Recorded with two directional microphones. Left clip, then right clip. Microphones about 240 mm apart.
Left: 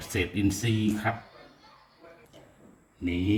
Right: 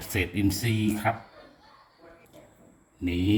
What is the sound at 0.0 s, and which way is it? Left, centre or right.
Speech, centre.